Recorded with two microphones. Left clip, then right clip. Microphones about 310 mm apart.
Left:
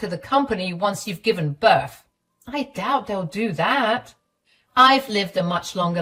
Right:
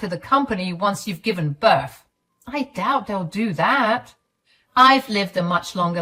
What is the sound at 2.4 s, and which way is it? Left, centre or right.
Speech, centre.